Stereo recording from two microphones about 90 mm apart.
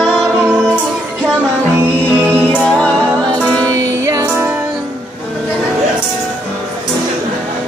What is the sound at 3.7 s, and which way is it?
Music, 35° right (ahead or behind).